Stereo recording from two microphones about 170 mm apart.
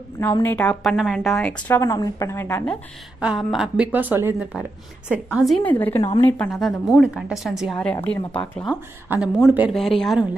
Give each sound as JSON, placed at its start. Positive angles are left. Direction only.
{"t": 0.2, "sound": "speech", "side_deg": 15}
{"t": 1.7, "sound": "a woman's voice", "side_deg": 20}
{"t": 3.2, "sound": "a woman's voice", "side_deg": -5}
{"t": 6.5, "sound": "speech", "side_deg": 0}
{"t": 9.1, "sound": "speech", "side_deg": -5}